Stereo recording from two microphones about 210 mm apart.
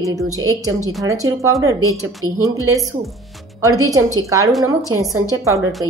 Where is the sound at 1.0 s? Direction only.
15° right (ahead or behind).